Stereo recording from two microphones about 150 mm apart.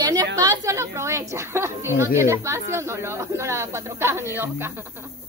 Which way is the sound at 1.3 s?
15° right (ahead or behind).